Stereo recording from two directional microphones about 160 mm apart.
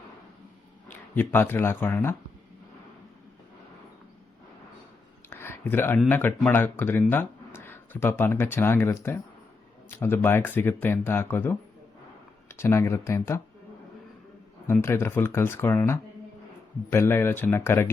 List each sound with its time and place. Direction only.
0.9 s speech: 10° left (ahead or behind)
5.3 s a sound: 15° left (ahead or behind)
6.1 s speech: 10° left (ahead or behind)
14.7 s speech: 15° left (ahead or behind)